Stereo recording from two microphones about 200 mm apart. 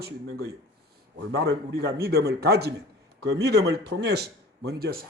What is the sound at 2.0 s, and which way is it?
A man's voice, 50° right (ahead or behind).